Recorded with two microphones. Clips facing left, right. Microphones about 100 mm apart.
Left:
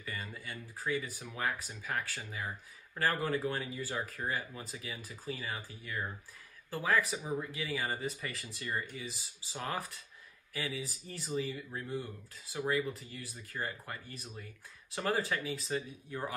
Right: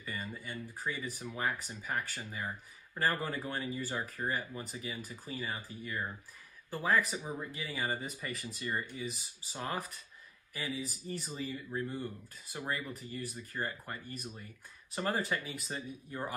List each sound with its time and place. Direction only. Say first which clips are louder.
0.0 s speech: right 1 dB; 5° right (ahead or behind)